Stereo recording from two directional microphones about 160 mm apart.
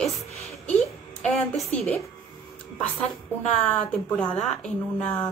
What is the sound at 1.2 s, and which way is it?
Speech, 5° left (ahead or behind).